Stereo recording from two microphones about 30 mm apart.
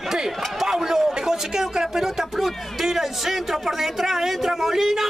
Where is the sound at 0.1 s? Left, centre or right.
Centre.